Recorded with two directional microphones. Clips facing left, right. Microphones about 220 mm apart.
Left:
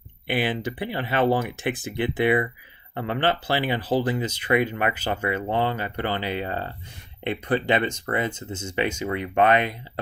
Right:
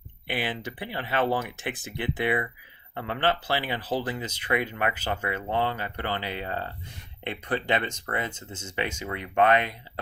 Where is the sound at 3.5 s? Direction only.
15° left (ahead or behind).